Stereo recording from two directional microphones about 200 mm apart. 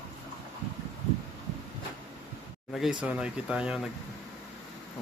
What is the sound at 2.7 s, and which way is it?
Speech, centre (ahead or behind).